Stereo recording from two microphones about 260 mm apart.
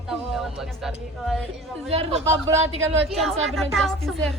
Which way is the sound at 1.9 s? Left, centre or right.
Right.